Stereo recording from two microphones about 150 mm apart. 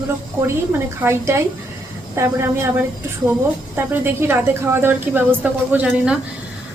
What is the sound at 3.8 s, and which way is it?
A woman's voice, 15° right (ahead or behind).